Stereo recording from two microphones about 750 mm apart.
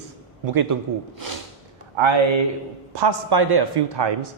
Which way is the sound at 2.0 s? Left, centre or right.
Right.